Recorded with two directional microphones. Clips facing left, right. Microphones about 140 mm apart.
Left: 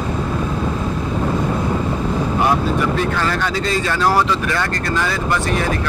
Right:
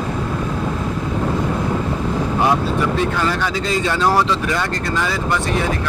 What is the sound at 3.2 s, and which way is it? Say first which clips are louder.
Speech: even; 15° right (ahead or behind).